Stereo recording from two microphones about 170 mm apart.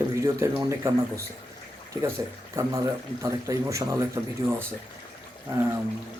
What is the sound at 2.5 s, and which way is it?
Speech, 20° right (ahead or behind).